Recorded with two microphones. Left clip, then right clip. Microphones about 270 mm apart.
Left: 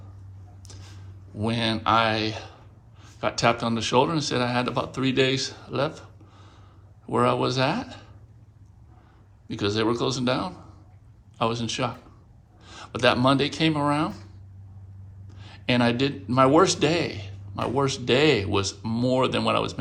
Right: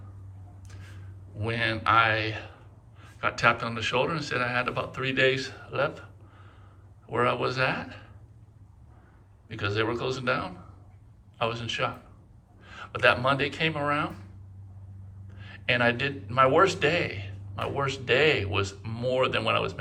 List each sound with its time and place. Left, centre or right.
1.4 s speech: centre
9.5 s speech: centre
15.4 s speech: centre